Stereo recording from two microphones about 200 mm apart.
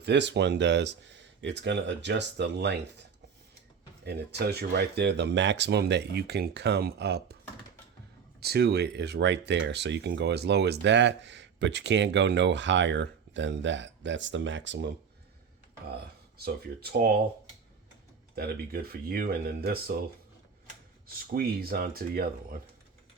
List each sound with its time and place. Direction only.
0.0 s speech: 60° right (ahead or behind)
4.0 s speech: 55° right (ahead or behind)
8.4 s speech: 55° right (ahead or behind)
16.4 s speech: 50° right (ahead or behind)
18.3 s speech: 50° right (ahead or behind)
21.3 s speech: 50° right (ahead or behind)